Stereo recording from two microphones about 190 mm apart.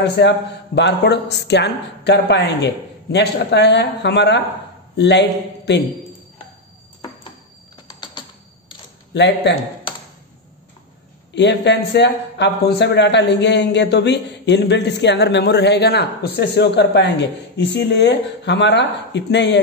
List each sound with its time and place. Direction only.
0.0 s speech: 65° left (ahead or behind)
9.1 s speech: 65° left (ahead or behind)
11.3 s speech: 65° left (ahead or behind)